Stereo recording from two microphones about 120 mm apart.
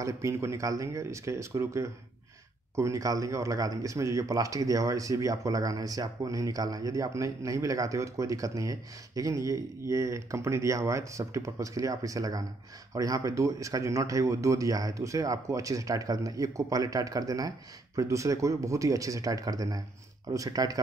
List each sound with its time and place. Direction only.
0.0 s a man's voice: 25° right (ahead or behind)